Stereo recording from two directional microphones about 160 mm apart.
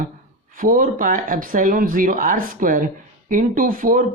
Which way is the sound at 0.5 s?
60° right (ahead or behind).